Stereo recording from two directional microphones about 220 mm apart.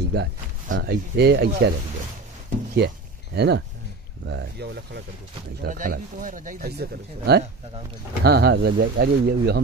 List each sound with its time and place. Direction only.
0.0 s speech: 50° right (ahead or behind)
3.3 s speech: 50° right (ahead or behind)